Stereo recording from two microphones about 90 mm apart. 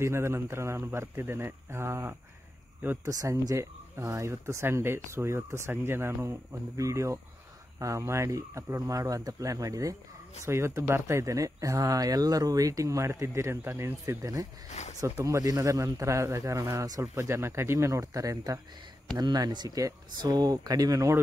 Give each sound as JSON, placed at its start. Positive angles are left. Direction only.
{"t": 0.0, "sound": "a man's voice", "side_deg": -30}
{"t": 3.2, "sound": "speech", "side_deg": -35}